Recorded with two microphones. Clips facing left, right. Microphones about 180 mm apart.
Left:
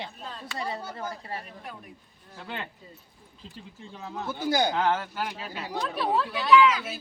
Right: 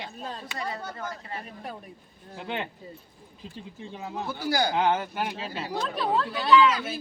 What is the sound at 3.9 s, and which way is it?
Speech, 20° right (ahead or behind).